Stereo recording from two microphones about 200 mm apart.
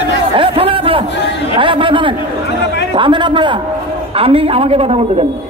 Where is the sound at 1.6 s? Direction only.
25° right (ahead or behind).